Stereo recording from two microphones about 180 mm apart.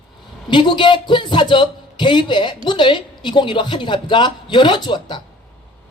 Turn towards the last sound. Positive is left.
turn(degrees=25)  # may be behind; listen again after turning